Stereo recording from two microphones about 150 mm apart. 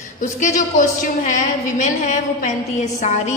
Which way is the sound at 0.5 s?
60° left (ahead or behind).